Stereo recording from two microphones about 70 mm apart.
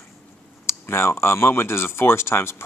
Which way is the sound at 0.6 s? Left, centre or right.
Left.